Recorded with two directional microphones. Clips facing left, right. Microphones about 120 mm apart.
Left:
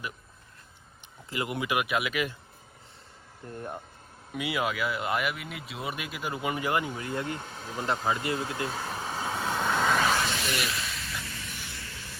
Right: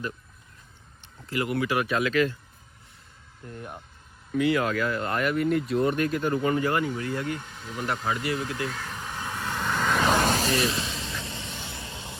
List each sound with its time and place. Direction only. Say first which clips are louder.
1.3 s speech: right 4 dB; 20° left (ahead or behind)
3.4 s speech: left 2 dB; 25° left (ahead or behind)
4.3 s speech: right 6 dB; 10° left (ahead or behind)
7.4 s speech: even; 35° left (ahead or behind)
7.8 s vehicle: even; 20° left (ahead or behind); by 10.1 s 5° left (ahead or behind)
10.1 s a sound: right 5 dB; 40° right (ahead or behind); by 12.1 s 20° right (ahead or behind)